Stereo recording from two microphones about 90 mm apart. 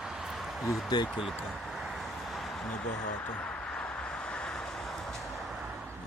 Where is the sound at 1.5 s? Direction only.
Centre (ahead or behind).